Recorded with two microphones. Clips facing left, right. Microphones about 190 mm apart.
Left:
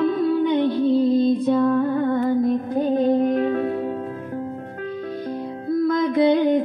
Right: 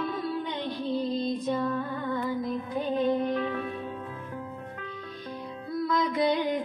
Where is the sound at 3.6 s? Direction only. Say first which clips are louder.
Left 11 dB; 65° left (ahead or behind).